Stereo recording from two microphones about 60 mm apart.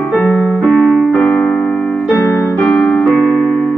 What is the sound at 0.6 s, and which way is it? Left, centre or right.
Piano, centre.